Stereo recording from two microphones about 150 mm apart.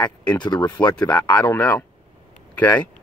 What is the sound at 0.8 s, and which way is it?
Speech, 10° left (ahead or behind).